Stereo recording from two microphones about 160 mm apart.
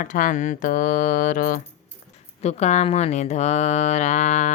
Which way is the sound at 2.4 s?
45° left (ahead or behind).